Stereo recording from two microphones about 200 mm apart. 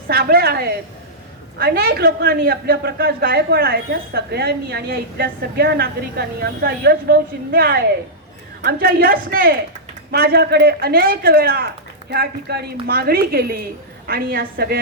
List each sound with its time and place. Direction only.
0.1 s a man's voice: 50° right (ahead or behind)